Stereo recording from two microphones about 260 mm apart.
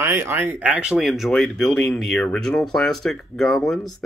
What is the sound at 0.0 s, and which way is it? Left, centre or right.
Speech, centre.